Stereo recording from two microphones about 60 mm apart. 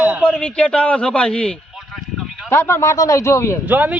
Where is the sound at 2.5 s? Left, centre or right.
Left.